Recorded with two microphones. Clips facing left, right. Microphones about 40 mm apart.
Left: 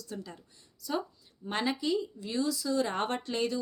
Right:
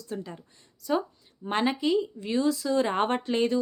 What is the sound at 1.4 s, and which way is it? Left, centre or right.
A woman's voice, right.